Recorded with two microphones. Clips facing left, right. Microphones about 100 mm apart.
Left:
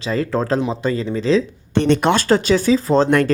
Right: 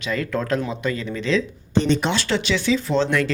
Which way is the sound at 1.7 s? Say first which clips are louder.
Left 5 dB; 60° left (ahead or behind).